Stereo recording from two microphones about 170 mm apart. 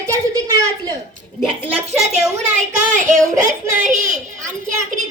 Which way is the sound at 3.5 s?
45° right (ahead or behind).